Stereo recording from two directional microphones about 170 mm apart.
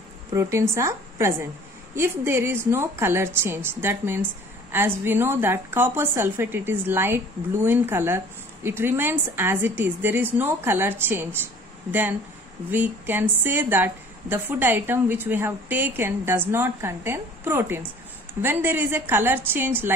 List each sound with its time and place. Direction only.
0.3 s a woman's voice: 15° right (ahead or behind)